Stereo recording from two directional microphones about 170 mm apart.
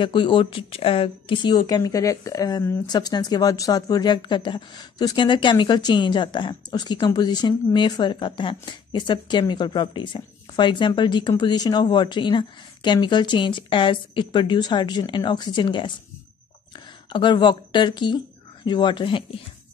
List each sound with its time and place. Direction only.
0.0 s speech: 30° left (ahead or behind)
17.1 s speech: 25° left (ahead or behind)